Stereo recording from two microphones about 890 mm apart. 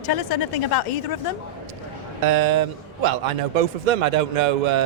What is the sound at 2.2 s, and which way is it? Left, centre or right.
A man's voice, right.